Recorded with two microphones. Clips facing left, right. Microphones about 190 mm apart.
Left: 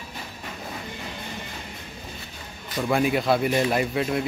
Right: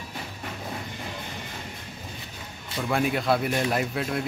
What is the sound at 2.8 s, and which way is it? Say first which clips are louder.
Speech: left 3 dB; 5° left (ahead or behind).